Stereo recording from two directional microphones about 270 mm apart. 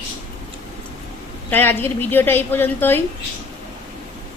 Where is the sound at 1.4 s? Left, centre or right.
Centre.